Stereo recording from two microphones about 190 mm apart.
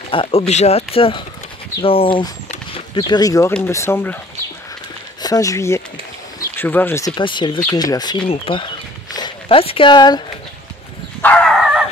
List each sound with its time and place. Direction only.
0.1 s speech: 30° left (ahead or behind); by 4.2 s 10° left (ahead or behind)
5.2 s speech: 20° left (ahead or behind)
7.2 s speech: 25° left (ahead or behind)
11.2 s a sound: centre (ahead or behind)